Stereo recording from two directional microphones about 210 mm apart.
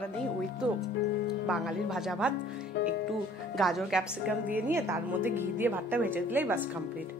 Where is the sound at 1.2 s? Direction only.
5° right (ahead or behind).